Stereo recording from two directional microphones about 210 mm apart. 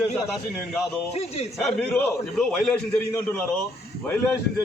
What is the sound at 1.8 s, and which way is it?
A man's voice, 5° left (ahead or behind).